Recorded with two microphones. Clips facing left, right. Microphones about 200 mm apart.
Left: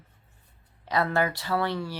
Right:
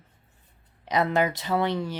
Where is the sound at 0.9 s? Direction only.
20° right (ahead or behind).